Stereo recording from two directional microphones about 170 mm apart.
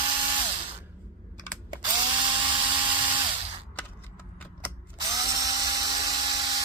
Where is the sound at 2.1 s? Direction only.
30° right (ahead or behind).